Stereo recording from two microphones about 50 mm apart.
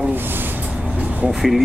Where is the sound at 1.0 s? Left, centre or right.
Right.